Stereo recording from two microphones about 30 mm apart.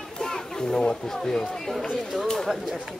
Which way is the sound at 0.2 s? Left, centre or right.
Centre.